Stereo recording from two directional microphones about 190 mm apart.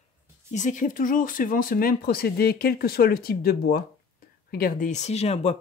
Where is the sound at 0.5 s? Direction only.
40° left (ahead or behind).